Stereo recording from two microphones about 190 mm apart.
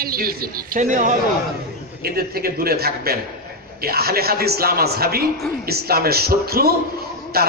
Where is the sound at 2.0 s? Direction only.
55° right (ahead or behind).